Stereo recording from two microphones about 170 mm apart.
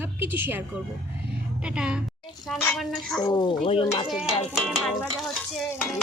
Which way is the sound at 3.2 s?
30° left (ahead or behind).